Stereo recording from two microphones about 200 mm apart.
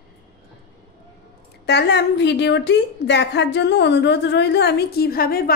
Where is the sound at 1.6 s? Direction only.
60° left (ahead or behind).